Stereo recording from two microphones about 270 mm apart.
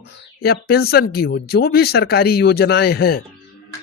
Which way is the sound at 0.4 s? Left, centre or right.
Left.